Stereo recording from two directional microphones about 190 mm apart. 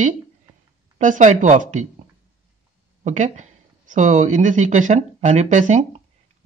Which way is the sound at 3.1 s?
40° right (ahead or behind).